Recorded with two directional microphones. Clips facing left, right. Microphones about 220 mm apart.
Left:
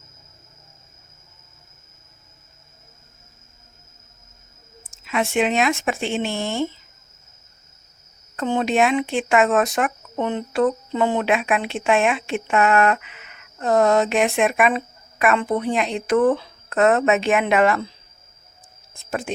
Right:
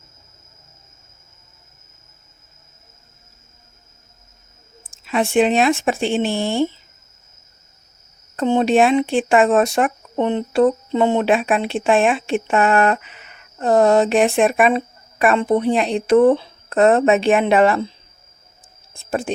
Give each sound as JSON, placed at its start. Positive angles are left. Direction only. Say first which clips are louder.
{"t": 5.0, "sound": "speech", "louder": "right 5 dB", "side_deg": -30}
{"t": 8.4, "sound": "speech", "louder": "right 5 dB", "side_deg": -30}
{"t": 18.9, "sound": "speech", "louder": "right 4 dB", "side_deg": -30}